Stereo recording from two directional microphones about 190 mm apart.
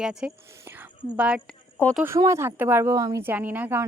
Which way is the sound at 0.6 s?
10° right (ahead or behind).